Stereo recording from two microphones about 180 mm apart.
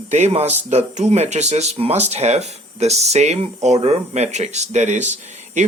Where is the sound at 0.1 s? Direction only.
35° right (ahead or behind).